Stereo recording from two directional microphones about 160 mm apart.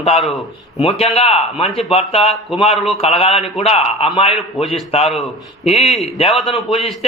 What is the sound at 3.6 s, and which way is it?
A man's voice, 40° left (ahead or behind).